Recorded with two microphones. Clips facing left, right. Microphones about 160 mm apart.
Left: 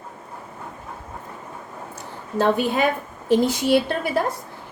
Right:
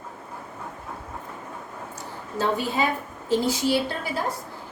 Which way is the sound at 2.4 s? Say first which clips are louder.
Left 5 dB; 60° left (ahead or behind).